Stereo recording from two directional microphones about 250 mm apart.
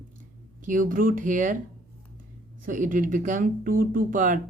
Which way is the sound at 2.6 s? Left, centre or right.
Right.